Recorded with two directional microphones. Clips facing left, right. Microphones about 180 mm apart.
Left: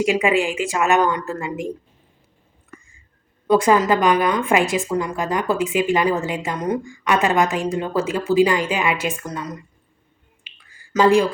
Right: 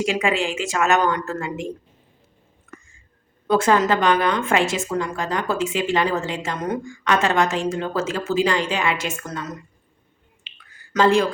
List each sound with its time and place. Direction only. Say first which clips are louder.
0.0 s a woman's voice: left 3 dB; 15° left (ahead or behind)
3.4 s a woman's voice: left 2 dB; 10° left (ahead or behind)
10.9 s a woman's voice: left 2 dB; 10° left (ahead or behind)